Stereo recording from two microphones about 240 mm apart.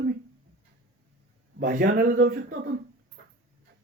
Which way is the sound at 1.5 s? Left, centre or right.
Right.